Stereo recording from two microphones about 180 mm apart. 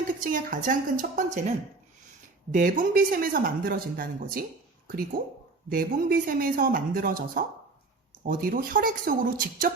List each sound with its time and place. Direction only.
0.1 s speech: 50° right (ahead or behind)
2.5 s speech: 45° right (ahead or behind)